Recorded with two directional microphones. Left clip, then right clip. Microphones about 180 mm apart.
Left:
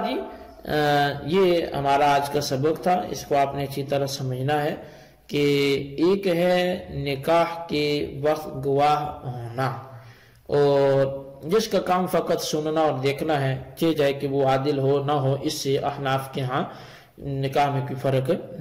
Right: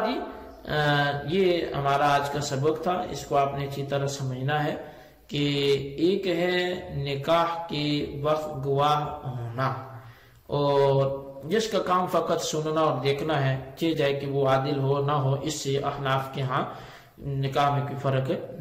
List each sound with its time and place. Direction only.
0.7 s a man's voice: 40° left (ahead or behind)
10.5 s a man's voice: 40° left (ahead or behind)
18.0 s a man's voice: 40° left (ahead or behind)